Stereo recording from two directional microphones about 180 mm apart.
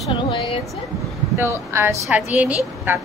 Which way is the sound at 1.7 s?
15° right (ahead or behind).